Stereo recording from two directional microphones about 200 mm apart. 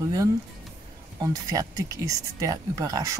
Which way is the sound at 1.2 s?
15° right (ahead or behind).